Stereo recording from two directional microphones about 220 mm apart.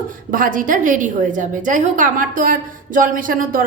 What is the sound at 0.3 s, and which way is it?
A woman's voice, 40° right (ahead or behind).